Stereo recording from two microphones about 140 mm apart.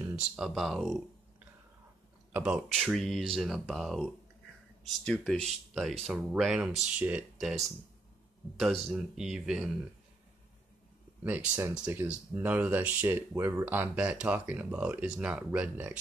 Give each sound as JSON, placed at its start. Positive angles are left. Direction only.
{"t": 0.0, "sound": "speech", "side_deg": -10}
{"t": 2.3, "sound": "speech", "side_deg": -5}
{"t": 11.2, "sound": "speech", "side_deg": -10}